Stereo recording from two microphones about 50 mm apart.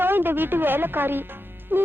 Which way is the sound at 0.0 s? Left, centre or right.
Right.